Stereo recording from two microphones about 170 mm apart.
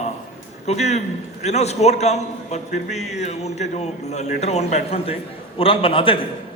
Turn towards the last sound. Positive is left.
turn(degrees=30)  # may be behind; listen again after turning